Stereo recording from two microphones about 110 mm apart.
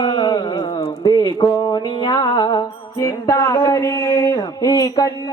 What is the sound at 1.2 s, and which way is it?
Music, 40° left (ahead or behind).